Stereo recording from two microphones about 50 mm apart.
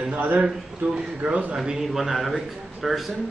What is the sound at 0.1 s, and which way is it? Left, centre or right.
Speech, right.